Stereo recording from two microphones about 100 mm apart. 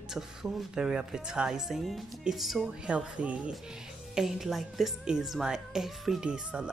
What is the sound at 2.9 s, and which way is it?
Speech, 10° right (ahead or behind).